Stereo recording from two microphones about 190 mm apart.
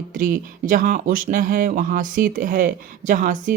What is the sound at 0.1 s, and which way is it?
Speech, 45° right (ahead or behind).